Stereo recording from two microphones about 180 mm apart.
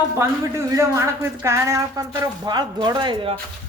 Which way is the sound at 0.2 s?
15° right (ahead or behind).